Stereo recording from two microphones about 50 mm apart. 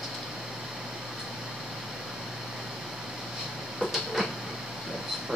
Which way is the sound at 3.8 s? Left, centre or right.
Centre.